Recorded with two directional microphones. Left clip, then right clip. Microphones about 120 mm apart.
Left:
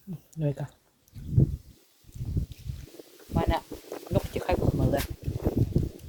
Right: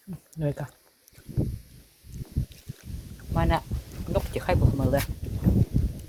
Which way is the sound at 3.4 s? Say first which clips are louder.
Right 2 dB; 35° left (ahead or behind).